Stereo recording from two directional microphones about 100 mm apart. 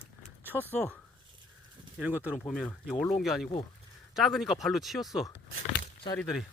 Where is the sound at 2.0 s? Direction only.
15° right (ahead or behind).